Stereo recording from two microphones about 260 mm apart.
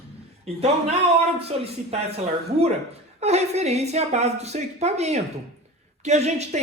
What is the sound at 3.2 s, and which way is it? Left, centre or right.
A man's voice, right.